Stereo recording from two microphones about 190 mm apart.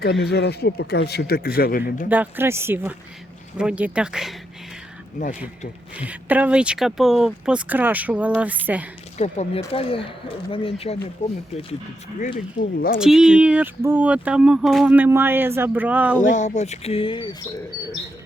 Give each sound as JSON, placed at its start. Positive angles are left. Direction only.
{"t": 0.0, "sound": "speech", "side_deg": 60}
{"t": 2.0, "sound": "speech", "side_deg": -10}
{"t": 6.0, "sound": "speech", "side_deg": -10}
{"t": 9.1, "sound": "speech", "side_deg": 35}
{"t": 12.5, "sound": "speech", "side_deg": 50}
{"t": 13.0, "sound": "speech", "side_deg": -5}
{"t": 16.3, "sound": "speech", "side_deg": 40}